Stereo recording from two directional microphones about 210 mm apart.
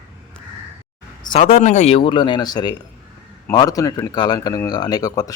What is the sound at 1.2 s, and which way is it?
A man's voice, 35° left (ahead or behind).